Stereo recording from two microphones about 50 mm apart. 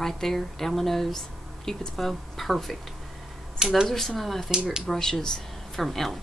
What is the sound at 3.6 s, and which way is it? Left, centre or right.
Speech, centre.